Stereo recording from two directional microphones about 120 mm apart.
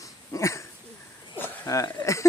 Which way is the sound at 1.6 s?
30° left (ahead or behind).